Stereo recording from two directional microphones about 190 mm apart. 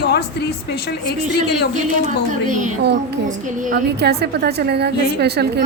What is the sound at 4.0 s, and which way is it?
A woman's voice, 60° right (ahead or behind).